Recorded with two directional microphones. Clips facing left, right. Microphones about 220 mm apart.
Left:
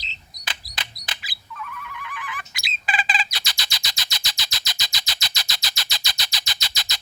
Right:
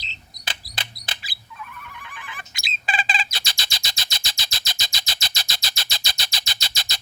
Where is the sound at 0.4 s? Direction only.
30° right (ahead or behind).